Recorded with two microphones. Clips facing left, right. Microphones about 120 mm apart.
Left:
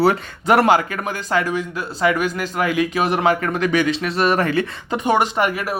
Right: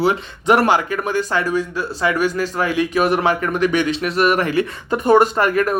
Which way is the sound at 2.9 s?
30° left (ahead or behind).